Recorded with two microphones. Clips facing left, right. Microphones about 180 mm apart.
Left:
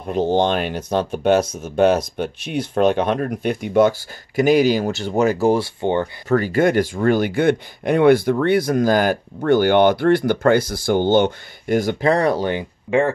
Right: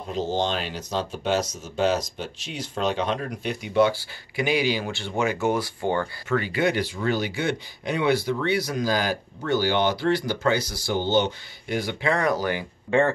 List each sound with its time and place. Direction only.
0.1 s speech: 60° left (ahead or behind); by 6.0 s 25° left (ahead or behind)
6.2 s speech: 40° left (ahead or behind); by 12.6 s 25° left (ahead or behind)
12.9 s speech: 10° left (ahead or behind)